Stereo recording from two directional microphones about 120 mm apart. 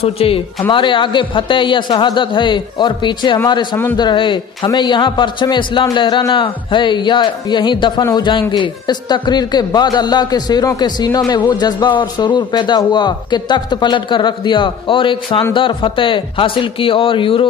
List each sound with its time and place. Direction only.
0.0 s a man's voice: 50° left (ahead or behind)